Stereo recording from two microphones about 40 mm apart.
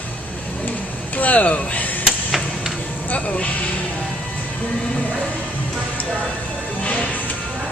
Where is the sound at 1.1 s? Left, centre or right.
Left.